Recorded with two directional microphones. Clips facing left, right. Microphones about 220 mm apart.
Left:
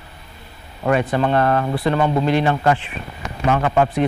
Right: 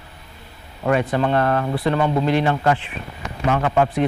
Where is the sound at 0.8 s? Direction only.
20° left (ahead or behind).